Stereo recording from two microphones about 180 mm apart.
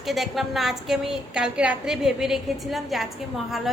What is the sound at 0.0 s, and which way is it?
A woman's voice, centre (ahead or behind).